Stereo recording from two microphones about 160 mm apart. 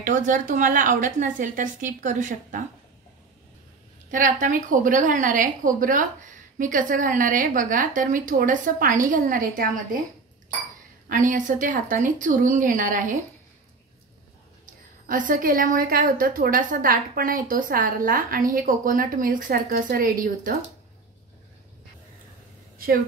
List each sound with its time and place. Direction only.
0.0 s a woman's voice: 55° right (ahead or behind)
4.1 s a woman's voice: 55° right (ahead or behind)
11.1 s a woman's voice: 55° right (ahead or behind)
14.7 s a woman's voice: 55° right (ahead or behind)